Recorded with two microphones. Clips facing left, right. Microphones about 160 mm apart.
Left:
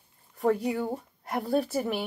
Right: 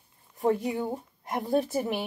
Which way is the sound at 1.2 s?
20° right (ahead or behind).